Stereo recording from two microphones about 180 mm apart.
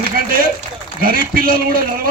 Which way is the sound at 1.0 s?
55° right (ahead or behind).